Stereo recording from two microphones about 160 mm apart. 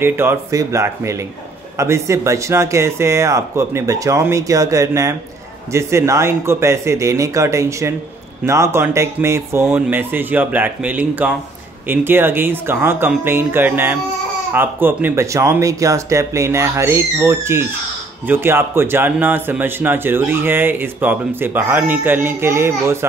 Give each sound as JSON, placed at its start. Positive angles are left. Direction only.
{"t": 0.0, "sound": "speech", "side_deg": -15}